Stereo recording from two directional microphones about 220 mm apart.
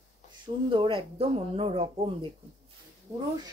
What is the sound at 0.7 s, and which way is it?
Speech, 25° right (ahead or behind).